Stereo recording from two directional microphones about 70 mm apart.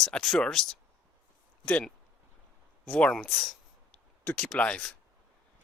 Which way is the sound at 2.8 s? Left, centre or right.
Centre.